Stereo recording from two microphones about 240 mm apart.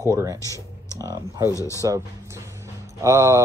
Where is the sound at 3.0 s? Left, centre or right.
Centre.